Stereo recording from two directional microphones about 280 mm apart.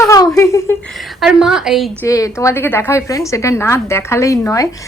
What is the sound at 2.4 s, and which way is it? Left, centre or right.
Child singing, centre.